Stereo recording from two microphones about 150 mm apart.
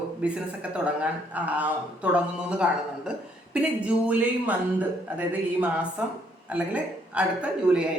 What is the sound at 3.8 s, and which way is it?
Speech, 10° right (ahead or behind).